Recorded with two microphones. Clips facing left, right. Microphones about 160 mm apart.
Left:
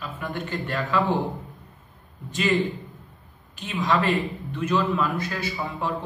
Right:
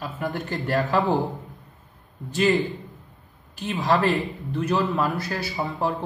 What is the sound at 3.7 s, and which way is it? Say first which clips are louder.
A man's voice: right 2 dB; 35° right (ahead or behind).